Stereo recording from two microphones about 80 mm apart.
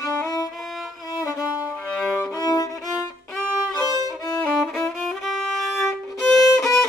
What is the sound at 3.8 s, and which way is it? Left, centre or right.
Violin, right.